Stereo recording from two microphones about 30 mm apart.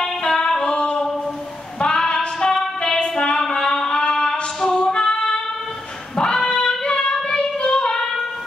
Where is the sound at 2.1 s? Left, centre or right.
Left.